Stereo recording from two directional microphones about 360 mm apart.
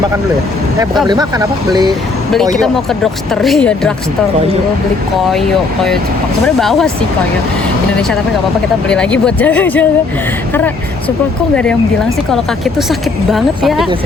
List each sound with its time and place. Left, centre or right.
0.8 s speech: centre
2.6 s speech: centre
5.3 s speech: centre
9.2 s speech: centre
11.5 s speech: centre